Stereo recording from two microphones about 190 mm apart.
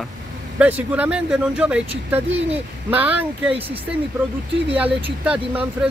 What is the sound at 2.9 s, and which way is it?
Speech, 10° right (ahead or behind).